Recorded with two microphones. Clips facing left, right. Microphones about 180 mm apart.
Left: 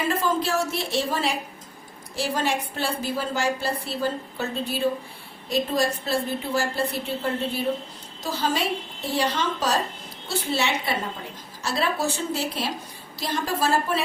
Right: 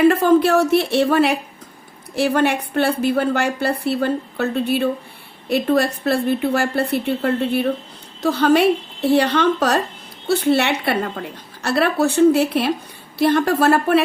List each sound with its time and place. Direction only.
0.0 s a woman's voice: 65° right (ahead or behind)